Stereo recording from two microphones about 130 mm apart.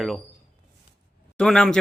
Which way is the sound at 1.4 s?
5° left (ahead or behind).